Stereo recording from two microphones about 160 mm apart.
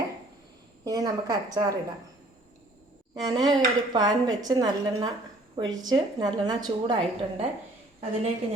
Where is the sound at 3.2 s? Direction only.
25° right (ahead or behind).